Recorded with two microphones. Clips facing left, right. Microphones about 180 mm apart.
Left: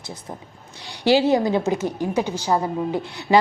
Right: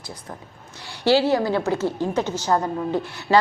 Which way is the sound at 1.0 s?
15° left (ahead or behind).